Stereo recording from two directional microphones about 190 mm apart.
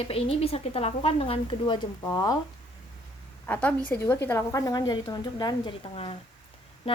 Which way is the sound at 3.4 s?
10° left (ahead or behind).